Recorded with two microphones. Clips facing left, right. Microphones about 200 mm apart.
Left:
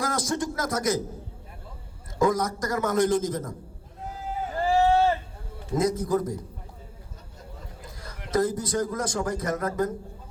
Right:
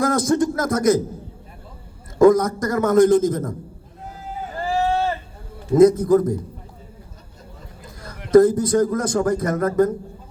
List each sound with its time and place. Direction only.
0.0 s a man's voice: 50° right (ahead or behind)
2.1 s a man's voice: 55° right (ahead or behind)
4.7 s a sound: 20° left (ahead or behind)
5.7 s a man's voice: 55° right (ahead or behind)
8.0 s a man's voice: 55° right (ahead or behind)